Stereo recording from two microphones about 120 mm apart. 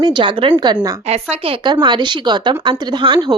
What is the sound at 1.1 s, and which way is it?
A woman's voice, 55° right (ahead or behind).